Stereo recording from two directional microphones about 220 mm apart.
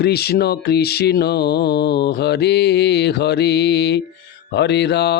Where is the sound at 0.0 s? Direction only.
45° left (ahead or behind).